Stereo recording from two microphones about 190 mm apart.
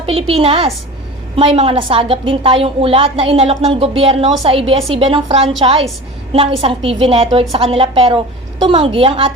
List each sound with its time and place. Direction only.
0.0 s a woman's voice: 30° right (ahead or behind)